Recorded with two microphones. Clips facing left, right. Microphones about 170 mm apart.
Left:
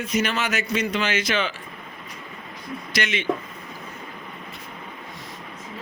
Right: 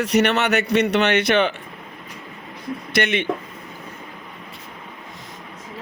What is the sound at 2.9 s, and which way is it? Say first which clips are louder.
Speech: right 6 dB; 60° right (ahead or behind).